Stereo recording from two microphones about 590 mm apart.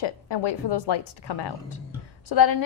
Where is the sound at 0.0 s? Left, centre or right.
Left.